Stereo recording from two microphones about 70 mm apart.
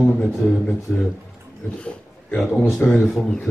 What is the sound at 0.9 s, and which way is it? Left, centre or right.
Speech, left.